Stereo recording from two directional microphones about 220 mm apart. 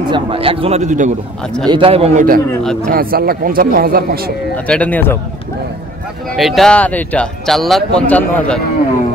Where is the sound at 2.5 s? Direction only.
5° left (ahead or behind).